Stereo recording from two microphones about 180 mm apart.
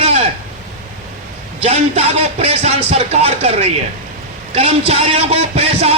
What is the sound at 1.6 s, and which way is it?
Speech, 35° right (ahead or behind).